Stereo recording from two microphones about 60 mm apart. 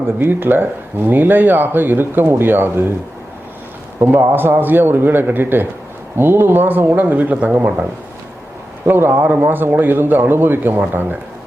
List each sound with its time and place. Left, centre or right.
0.2 s speech: right
4.0 s speech: right
8.9 s speech: right